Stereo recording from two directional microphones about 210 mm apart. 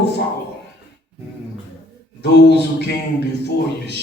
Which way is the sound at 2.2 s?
50° left (ahead or behind).